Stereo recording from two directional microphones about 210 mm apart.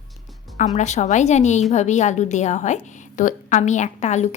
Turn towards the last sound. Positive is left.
turn(degrees=35)  # may be behind; listen again after turning